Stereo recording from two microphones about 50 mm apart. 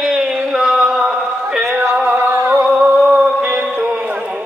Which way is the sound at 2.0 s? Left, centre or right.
Right.